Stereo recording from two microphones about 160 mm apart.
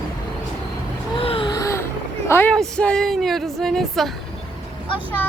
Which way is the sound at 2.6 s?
5° left (ahead or behind).